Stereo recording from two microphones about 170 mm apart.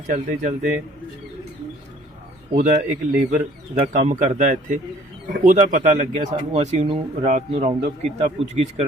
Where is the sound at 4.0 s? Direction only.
45° right (ahead or behind).